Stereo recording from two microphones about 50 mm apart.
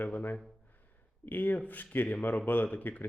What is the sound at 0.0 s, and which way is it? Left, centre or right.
A man's voice, left.